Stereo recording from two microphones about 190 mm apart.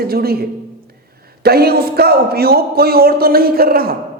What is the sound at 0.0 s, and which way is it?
Speech, 55° right (ahead or behind).